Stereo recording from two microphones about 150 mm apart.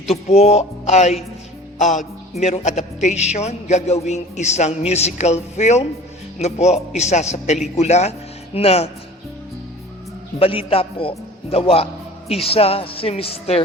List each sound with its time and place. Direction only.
0.1 s speech: 45° left (ahead or behind)
1.8 s music: 55° left (ahead or behind)
10.4 s a man's voice: 40° left (ahead or behind)